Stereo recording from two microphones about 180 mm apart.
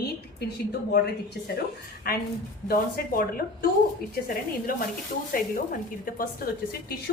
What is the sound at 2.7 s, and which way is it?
Speech, 55° left (ahead or behind).